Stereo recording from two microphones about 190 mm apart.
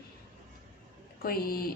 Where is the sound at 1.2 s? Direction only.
50° left (ahead or behind).